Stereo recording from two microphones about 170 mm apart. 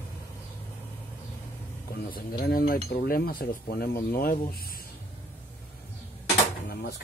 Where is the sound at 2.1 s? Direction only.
60° left (ahead or behind).